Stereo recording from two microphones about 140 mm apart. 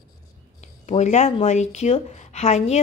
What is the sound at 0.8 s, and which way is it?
A woman's voice, 55° left (ahead or behind).